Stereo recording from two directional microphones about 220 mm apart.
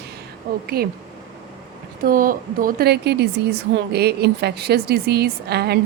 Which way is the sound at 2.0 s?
40° right (ahead or behind).